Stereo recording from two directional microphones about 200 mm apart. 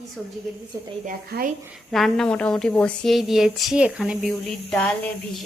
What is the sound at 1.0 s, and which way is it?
Speech, 45° right (ahead or behind).